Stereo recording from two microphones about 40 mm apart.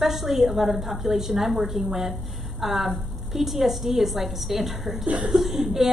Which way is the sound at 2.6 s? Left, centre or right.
Centre.